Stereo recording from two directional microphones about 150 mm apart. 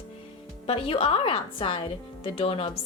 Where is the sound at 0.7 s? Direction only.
40° left (ahead or behind).